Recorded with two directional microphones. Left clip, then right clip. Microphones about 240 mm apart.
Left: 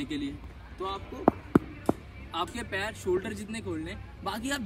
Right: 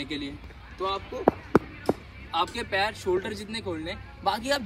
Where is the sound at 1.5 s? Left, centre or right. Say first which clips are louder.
Right 4 dB; centre.